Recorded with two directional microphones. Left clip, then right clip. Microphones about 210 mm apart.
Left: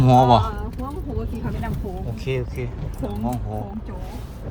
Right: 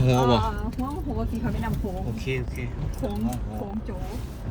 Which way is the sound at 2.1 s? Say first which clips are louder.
Left 4 dB; 10° left (ahead or behind).